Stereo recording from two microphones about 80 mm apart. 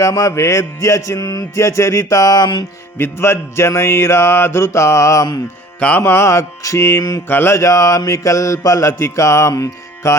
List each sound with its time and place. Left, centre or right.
0.0 s mantra: left
3.0 s mantra: left